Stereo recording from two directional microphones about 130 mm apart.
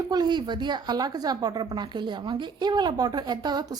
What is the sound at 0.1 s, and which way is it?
Speech, 35° right (ahead or behind).